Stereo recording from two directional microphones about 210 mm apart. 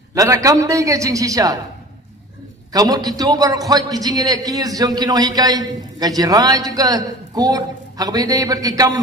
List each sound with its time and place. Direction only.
0.1 s a man's voice: 15° right (ahead or behind)
2.7 s a man's voice: 20° right (ahead or behind)